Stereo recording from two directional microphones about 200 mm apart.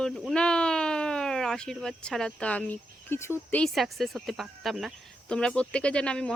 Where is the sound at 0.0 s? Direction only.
Centre (ahead or behind).